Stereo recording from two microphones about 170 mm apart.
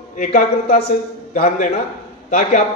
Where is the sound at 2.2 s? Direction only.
45° left (ahead or behind).